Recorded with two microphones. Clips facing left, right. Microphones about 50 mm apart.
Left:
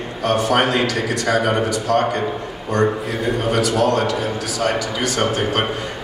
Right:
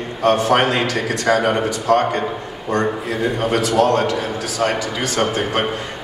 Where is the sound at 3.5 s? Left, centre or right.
Right.